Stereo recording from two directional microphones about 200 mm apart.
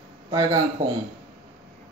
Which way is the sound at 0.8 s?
45° right (ahead or behind).